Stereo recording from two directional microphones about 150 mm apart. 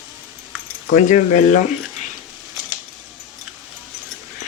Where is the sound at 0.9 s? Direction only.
50° left (ahead or behind).